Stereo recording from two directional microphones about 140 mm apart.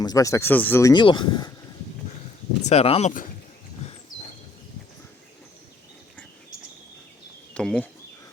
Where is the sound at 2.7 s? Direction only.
45° left (ahead or behind).